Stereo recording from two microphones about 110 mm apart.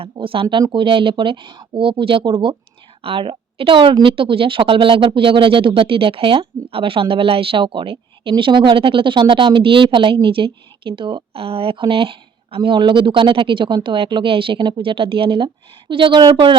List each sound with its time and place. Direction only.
0.0 s a woman's voice: 55° right (ahead or behind)